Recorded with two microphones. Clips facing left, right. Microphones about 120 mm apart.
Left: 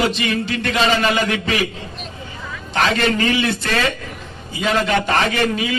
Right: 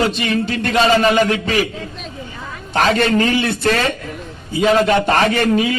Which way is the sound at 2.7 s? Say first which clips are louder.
Right 3 dB; 40° right (ahead or behind).